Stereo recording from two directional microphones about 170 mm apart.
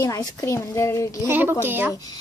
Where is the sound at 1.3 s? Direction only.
10° right (ahead or behind).